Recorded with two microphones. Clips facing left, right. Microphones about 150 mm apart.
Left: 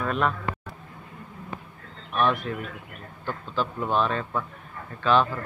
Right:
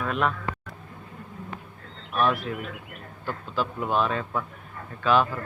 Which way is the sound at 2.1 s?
5° right (ahead or behind).